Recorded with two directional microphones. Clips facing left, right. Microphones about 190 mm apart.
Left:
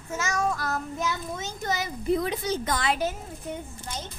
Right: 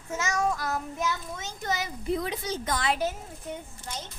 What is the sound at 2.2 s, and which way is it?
Speech, 55° left (ahead or behind).